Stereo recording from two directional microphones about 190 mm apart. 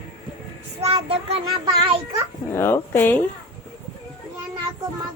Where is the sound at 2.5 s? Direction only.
10° left (ahead or behind).